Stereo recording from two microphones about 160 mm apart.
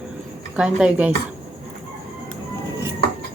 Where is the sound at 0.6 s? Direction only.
5° right (ahead or behind).